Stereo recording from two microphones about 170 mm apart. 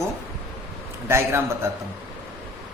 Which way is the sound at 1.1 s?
15° right (ahead or behind).